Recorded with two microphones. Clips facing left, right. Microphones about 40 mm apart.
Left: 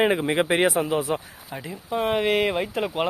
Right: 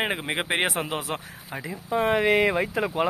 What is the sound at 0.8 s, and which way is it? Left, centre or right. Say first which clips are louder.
Speech: left 6 dB; right.